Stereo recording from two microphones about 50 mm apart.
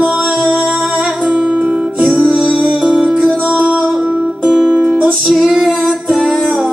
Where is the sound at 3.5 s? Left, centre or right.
Right.